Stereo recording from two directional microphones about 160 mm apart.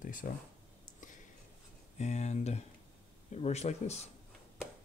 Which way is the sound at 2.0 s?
45° left (ahead or behind).